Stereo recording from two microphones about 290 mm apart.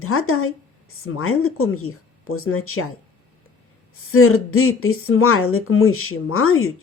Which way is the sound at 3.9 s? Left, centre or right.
Left.